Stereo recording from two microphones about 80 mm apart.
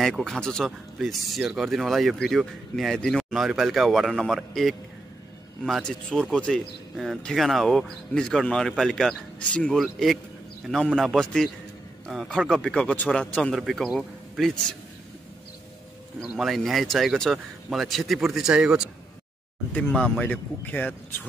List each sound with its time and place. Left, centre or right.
0.0 s speech: centre
0.7 s speech: centre
5.8 s speech: centre
13.5 s speech: centre
16.2 s speech: centre
19.9 s speech: centre
20.2 s speech: left